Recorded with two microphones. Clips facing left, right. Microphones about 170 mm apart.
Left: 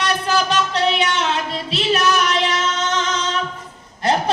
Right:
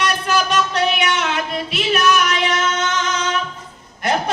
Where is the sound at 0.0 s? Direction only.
35° left (ahead or behind).